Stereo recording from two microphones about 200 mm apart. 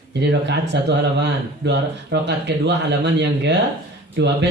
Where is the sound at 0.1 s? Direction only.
60° right (ahead or behind).